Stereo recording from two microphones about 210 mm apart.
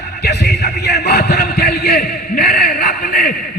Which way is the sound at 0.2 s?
50° left (ahead or behind).